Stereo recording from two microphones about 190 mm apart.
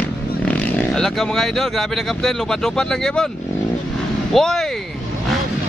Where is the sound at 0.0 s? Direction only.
10° left (ahead or behind).